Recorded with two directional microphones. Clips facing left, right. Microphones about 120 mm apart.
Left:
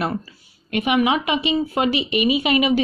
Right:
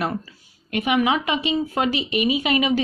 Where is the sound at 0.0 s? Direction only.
20° left (ahead or behind).